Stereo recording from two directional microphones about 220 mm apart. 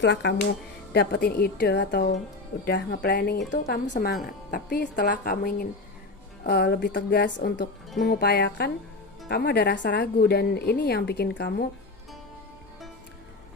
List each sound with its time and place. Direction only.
0.0 s a woman's voice: 50° left (ahead or behind)